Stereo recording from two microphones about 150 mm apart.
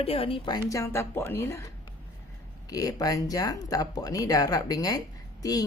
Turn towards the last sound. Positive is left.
turn(degrees=25)  # may be behind; listen again after turning